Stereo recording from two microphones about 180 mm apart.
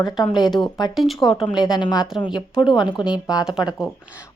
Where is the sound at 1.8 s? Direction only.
20° left (ahead or behind).